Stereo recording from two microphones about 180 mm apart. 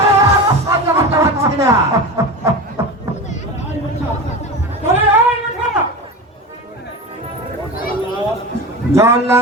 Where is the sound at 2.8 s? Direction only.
15° right (ahead or behind).